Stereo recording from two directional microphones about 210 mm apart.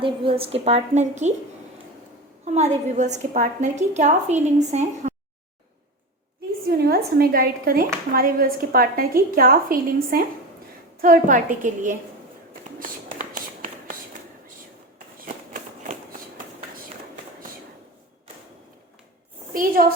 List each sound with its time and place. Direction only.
0.0 s a woman's voice: 25° right (ahead or behind)
2.4 s a woman's voice: 35° right (ahead or behind)
6.7 s a woman's voice: 50° right (ahead or behind)
12.8 s a sound: 35° right (ahead or behind)
19.8 s a woman's voice: 35° right (ahead or behind)